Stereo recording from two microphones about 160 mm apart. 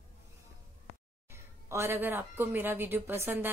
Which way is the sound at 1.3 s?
15° right (ahead or behind).